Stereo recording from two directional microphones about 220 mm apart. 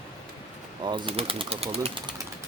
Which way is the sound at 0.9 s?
20° right (ahead or behind).